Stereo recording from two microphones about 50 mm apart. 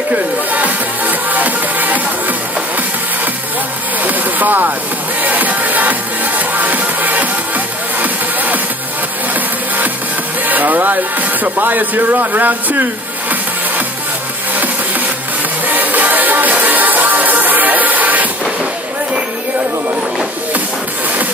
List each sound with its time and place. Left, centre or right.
0.1 s music: right
4.0 s speech: right
5.2 s music: right
10.4 s speech: right
15.6 s music: right